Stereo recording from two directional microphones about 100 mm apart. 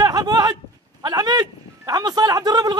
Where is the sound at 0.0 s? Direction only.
40° right (ahead or behind).